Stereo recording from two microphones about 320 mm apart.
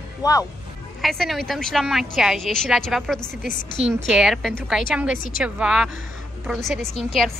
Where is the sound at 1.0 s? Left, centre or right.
Centre.